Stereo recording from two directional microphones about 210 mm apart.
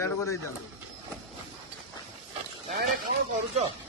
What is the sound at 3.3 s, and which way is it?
Speech, 30° right (ahead or behind).